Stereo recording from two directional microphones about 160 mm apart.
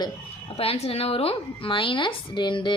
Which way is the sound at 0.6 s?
40° left (ahead or behind).